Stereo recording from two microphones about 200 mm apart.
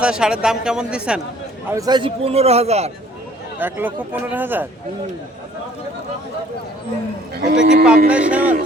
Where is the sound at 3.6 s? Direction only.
10° right (ahead or behind).